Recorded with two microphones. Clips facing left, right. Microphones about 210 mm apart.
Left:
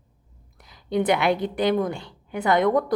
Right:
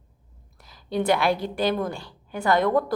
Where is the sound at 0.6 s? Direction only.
20° left (ahead or behind).